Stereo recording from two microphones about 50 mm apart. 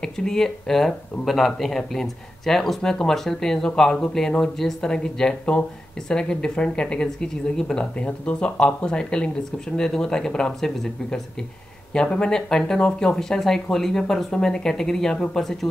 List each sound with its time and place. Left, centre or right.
0.0 s speech: centre